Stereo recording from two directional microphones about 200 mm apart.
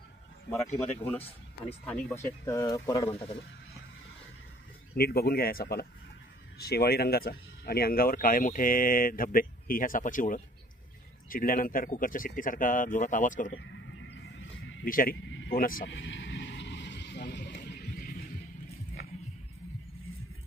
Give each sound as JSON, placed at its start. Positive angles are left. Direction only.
{"t": 1.9, "sound": "speech", "side_deg": 10}
{"t": 3.1, "sound": "speech", "side_deg": 30}
{"t": 4.9, "sound": "speech", "side_deg": 50}
{"t": 13.6, "sound": "a sound", "side_deg": 60}
{"t": 14.9, "sound": "speech", "side_deg": 45}
{"t": 15.9, "sound": "vehicle", "side_deg": 70}
{"t": 17.5, "sound": "a sound", "side_deg": 45}